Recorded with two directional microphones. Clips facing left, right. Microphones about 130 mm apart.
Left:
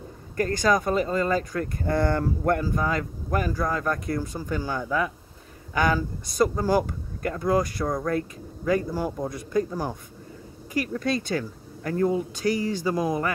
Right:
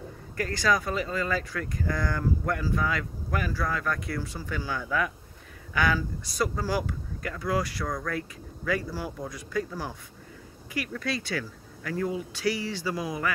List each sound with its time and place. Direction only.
0.4 s a man's voice: 45° left (ahead or behind)
2.0 s a man's voice: 60° left (ahead or behind); by 4.8 s 45° left (ahead or behind)
4.8 s speech: 30° left (ahead or behind)
5.8 s a man's voice: 45° left (ahead or behind)
7.8 s speech: 25° left (ahead or behind)
8.1 s a man's voice: 40° left (ahead or behind)
10.8 s a man's voice: 40° left (ahead or behind)